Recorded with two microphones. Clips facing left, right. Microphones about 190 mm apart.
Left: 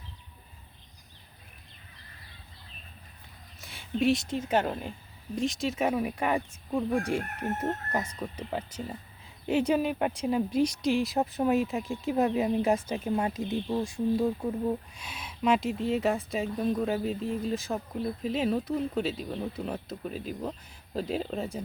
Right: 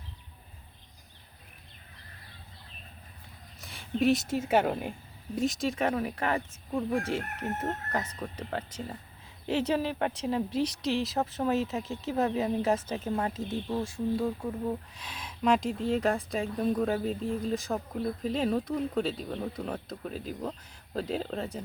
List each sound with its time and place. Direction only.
3.6 s speech: centre (ahead or behind)
10.5 s speech: 30° right (ahead or behind)
11.0 s speech: 15° left (ahead or behind)